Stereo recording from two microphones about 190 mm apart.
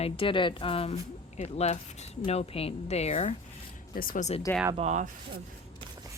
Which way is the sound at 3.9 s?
45° left (ahead or behind).